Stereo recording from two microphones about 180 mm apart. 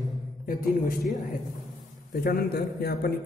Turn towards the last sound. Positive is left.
turn(degrees=60)  # may be behind; listen again after turning